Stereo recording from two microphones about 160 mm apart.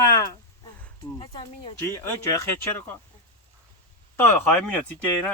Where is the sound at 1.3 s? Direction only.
25° left (ahead or behind).